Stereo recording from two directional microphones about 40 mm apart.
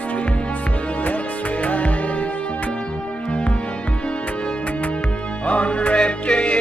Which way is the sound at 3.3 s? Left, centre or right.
Left.